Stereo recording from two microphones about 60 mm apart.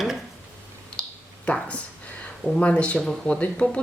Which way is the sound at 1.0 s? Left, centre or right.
Centre.